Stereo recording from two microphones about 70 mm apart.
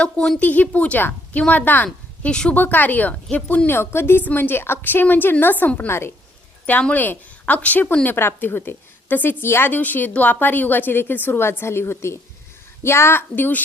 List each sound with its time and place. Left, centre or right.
0.0 s a woman's voice: centre
3.8 s a child's voice: left